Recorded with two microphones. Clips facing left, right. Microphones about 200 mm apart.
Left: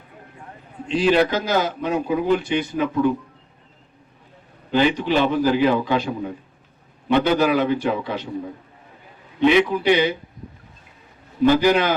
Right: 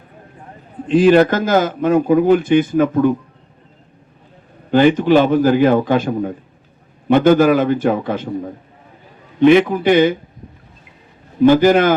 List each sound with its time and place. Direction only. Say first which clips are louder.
0.9 s a man's voice: right 7 dB; 50° right (ahead or behind)
4.7 s a man's voice: right 7 dB; 50° right (ahead or behind)
9.4 s a man's voice: right 6 dB; 50° right (ahead or behind)
11.4 s a man's voice: right 6 dB; 50° right (ahead or behind)